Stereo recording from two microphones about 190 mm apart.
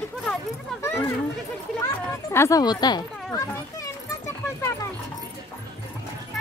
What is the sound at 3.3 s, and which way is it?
Children playing, 15° left (ahead or behind).